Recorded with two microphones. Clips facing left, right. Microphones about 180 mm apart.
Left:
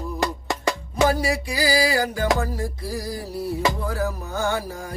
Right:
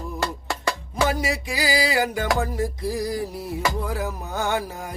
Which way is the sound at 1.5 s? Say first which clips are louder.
Left 2 dB; 20° right (ahead or behind).